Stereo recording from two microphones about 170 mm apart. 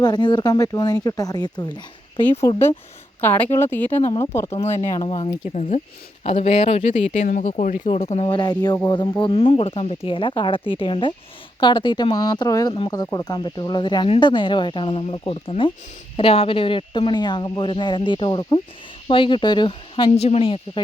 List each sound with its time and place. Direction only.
0.0 s speech: 25° left (ahead or behind)
3.2 s speech: 10° left (ahead or behind)
4.6 s speech: 40° left (ahead or behind)
4.9 s speech: 25° left (ahead or behind)
5.5 s speech: 45° left (ahead or behind)
8.3 s speech: 25° left (ahead or behind)
20.1 s speech: 40° left (ahead or behind)